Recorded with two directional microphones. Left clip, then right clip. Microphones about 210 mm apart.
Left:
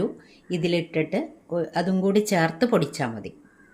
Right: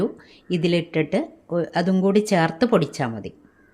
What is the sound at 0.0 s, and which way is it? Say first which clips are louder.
Speech: right 3 dB; 20° right (ahead or behind).